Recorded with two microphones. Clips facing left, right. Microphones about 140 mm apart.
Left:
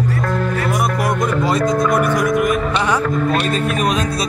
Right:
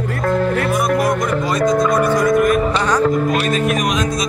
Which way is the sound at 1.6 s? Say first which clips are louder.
Right 4 dB; 20° right (ahead or behind).